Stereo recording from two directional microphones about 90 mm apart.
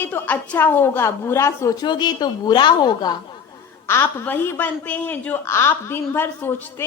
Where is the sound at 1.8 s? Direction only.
55° left (ahead or behind).